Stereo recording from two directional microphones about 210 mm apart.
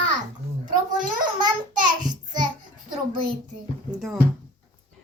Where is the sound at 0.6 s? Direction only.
40° right (ahead or behind).